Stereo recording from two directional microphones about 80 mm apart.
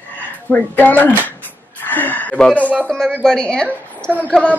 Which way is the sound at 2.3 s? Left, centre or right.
Centre.